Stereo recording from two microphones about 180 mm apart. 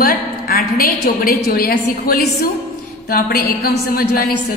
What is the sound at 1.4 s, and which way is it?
A woman's voice, 60° left (ahead or behind).